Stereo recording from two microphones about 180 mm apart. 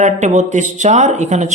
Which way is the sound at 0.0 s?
40° right (ahead or behind).